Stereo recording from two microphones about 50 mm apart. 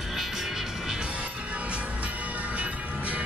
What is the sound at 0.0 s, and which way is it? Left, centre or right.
Music, centre.